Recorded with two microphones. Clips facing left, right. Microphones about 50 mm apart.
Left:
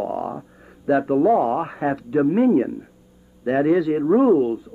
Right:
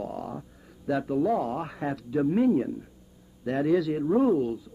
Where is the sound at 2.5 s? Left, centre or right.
Left.